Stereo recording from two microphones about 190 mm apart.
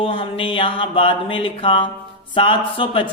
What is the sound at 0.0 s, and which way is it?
Speech, 30° left (ahead or behind).